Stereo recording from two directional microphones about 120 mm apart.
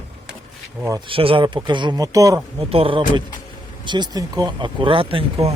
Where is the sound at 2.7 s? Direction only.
50° right (ahead or behind).